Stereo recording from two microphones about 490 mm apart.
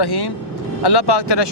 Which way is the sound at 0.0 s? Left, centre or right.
Left.